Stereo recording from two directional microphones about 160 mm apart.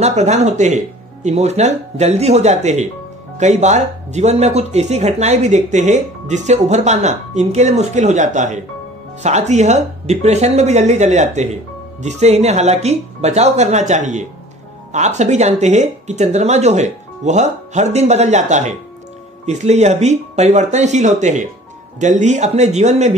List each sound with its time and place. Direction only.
0.0 s speech: 45° right (ahead or behind)